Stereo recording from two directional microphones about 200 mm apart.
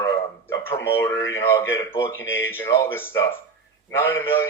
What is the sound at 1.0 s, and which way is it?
A man's voice, 15° left (ahead or behind).